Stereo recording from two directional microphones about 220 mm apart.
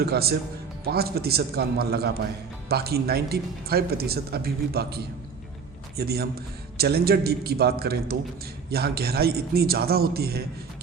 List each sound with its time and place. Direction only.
0.0 s speech: 45° right (ahead or behind)